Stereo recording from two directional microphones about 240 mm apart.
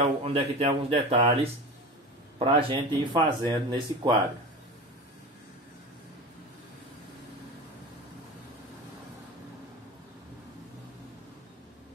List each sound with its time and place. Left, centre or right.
0.0 s speech: right